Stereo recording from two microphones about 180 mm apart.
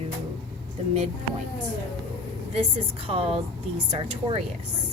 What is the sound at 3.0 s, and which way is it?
A woman's voice, 30° right (ahead or behind).